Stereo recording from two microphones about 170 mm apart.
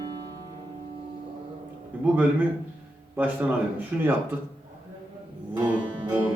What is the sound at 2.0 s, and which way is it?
Speech, 10° right (ahead or behind).